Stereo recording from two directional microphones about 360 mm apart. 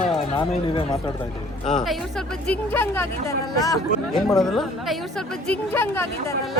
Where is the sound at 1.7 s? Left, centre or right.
Centre.